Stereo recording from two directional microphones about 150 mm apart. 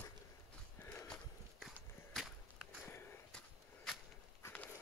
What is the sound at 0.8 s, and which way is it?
Horse, 10° left (ahead or behind).